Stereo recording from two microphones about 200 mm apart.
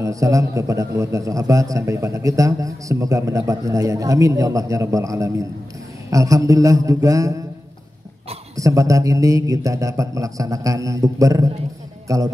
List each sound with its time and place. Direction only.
0.0 s a man's voice: 15° right (ahead or behind)
8.5 s a man's voice: 15° right (ahead or behind)